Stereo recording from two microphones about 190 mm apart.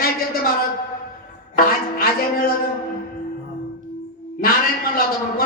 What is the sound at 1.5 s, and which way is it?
Speech, 50° left (ahead or behind).